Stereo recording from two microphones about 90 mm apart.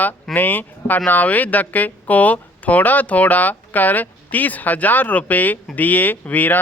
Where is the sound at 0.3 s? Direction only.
20° left (ahead or behind).